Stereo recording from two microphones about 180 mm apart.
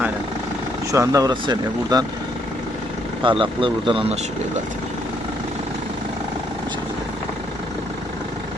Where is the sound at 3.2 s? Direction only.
30° right (ahead or behind).